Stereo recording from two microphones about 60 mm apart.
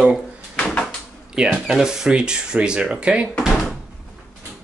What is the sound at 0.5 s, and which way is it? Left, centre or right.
Door, centre.